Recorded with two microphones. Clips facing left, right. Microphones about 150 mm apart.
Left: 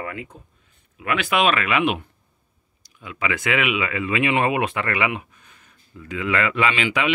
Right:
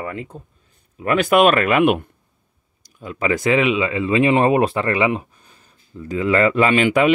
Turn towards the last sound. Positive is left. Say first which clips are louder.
# right 7 dB
turn(degrees=-45)  # may be behind; listen again after turning